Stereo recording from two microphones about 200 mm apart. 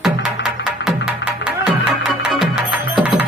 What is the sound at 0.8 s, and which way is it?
Music, 60° left (ahead or behind).